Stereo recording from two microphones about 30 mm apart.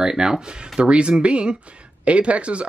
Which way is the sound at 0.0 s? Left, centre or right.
Right.